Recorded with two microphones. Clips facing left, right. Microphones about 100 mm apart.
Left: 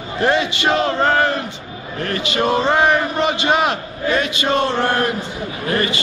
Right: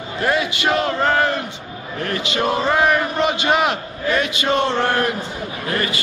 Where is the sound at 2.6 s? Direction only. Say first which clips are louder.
Even; 25° left (ahead or behind).